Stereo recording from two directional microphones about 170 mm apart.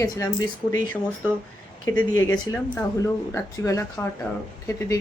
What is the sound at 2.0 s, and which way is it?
Speech, 15° left (ahead or behind).